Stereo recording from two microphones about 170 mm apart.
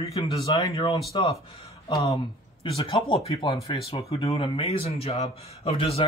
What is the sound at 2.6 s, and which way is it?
Speech, 35° left (ahead or behind).